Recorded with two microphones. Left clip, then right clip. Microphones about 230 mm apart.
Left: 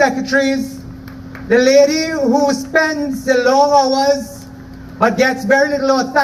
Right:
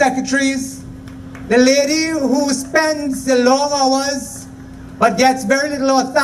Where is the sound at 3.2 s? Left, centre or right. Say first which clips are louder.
Left 2 dB; right.